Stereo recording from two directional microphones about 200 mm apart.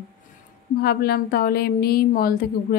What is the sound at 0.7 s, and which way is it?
A woman's voice, 50° left (ahead or behind).